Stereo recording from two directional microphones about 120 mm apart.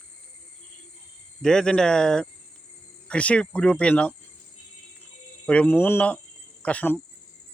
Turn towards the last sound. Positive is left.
turn(degrees=10)  # may be behind; listen again after turning